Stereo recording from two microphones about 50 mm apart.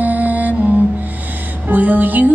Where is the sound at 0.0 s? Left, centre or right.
Right.